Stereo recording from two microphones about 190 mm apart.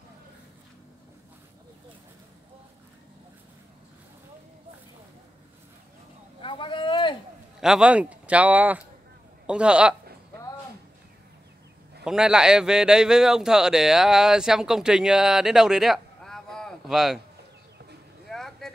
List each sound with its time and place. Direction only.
6.4 s vehicle: 25° left (ahead or behind)
7.6 s a man's voice: 5° right (ahead or behind)
12.0 s a man's voice: 5° right (ahead or behind)
18.3 s vehicle: centre (ahead or behind)